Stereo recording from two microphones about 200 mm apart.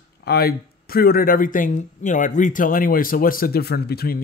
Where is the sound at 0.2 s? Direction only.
50° left (ahead or behind).